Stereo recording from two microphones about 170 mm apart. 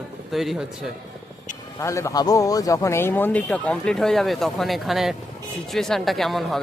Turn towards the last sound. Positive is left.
turn(degrees=0)  # may be behind; listen again after turning